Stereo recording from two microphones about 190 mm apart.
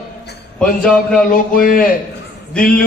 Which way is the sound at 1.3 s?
45° left (ahead or behind).